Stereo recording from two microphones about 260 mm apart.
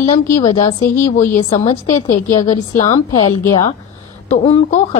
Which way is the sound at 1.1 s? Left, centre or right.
Left.